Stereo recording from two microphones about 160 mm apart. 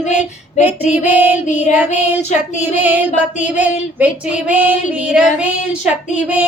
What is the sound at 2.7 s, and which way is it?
Female singing, 10° right (ahead or behind).